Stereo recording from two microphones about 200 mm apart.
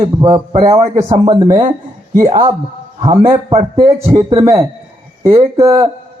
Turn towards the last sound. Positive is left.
turn(degrees=-15)  # may be behind; listen again after turning